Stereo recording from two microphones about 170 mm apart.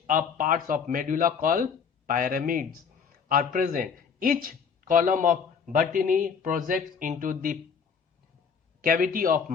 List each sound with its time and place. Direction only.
0.1 s speech: 55° right (ahead or behind)
8.8 s speech: 55° right (ahead or behind)